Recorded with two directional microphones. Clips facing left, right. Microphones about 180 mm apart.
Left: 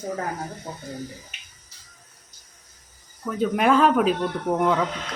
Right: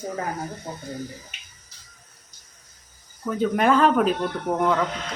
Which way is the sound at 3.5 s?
Centre (ahead or behind).